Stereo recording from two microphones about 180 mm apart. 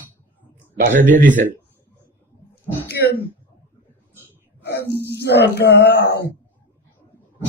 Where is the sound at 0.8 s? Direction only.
45° right (ahead or behind).